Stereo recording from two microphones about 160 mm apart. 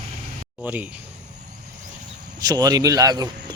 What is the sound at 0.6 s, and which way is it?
Speech, 10° right (ahead or behind).